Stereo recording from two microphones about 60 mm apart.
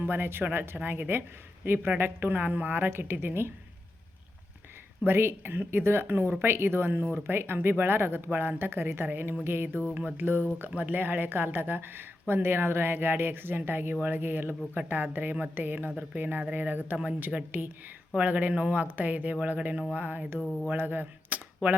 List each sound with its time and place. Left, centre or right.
0.0 s speech: right
5.0 s speech: right
10.7 s speech: right
20.4 s a sound: centre
20.7 s speech: right